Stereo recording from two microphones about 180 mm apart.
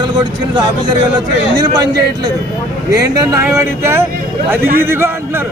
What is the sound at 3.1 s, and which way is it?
Speech, 20° right (ahead or behind).